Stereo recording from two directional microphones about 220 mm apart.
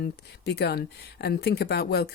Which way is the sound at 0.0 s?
50° left (ahead or behind).